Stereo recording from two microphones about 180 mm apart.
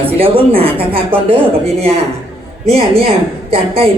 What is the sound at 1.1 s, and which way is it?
Speech, 35° right (ahead or behind).